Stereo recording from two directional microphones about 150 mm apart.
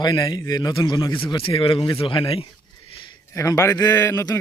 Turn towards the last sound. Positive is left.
turn(degrees=20)  # may be behind; listen again after turning